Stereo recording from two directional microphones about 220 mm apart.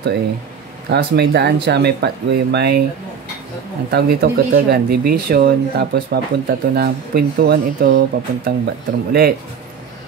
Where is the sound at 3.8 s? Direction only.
45° right (ahead or behind).